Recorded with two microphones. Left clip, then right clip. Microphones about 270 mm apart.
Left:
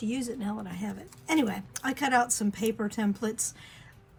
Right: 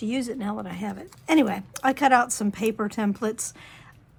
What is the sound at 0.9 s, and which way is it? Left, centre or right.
Speech, centre.